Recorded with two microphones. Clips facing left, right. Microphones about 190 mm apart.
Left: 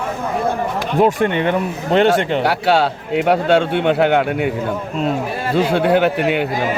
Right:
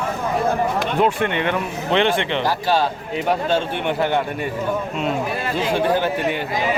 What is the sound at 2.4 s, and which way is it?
Speech, 70° left (ahead or behind).